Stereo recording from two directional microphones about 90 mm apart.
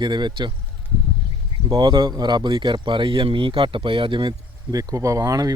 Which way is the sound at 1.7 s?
55° right (ahead or behind).